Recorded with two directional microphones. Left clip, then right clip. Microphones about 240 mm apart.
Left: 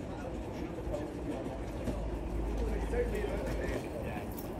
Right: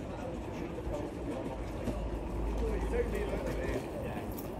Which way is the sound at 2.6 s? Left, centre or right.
Right.